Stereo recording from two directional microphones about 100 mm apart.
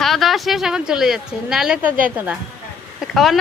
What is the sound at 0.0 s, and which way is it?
A woman's voice, centre (ahead or behind).